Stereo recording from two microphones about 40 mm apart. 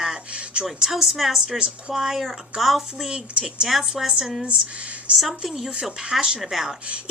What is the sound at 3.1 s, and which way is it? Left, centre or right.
Speech, centre.